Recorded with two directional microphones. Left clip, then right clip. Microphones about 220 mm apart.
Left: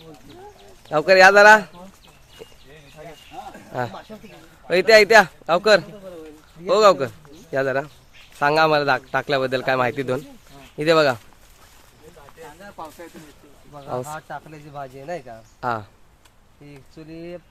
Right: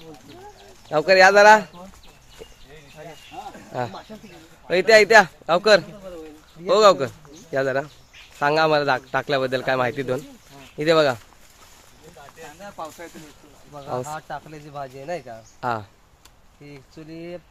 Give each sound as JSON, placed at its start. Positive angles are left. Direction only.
{"t": 0.9, "sound": "speech", "side_deg": 10}
{"t": 2.4, "sound": "a sound", "side_deg": 10}
{"t": 3.5, "sound": "snake", "side_deg": 10}
{"t": 4.7, "sound": "speech", "side_deg": 10}
{"t": 12.7, "sound": "speech", "side_deg": -25}
{"t": 13.7, "sound": "speech", "side_deg": 5}